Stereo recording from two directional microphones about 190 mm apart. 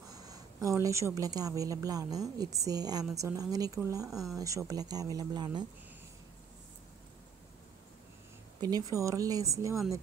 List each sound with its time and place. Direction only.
0.1 s speech: 20° right (ahead or behind)
4.1 s speech: centre (ahead or behind)
4.4 s speech: 15° right (ahead or behind)
8.5 s speech: 20° right (ahead or behind)